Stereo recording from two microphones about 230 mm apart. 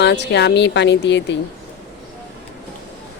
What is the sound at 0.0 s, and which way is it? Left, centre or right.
Speech, left.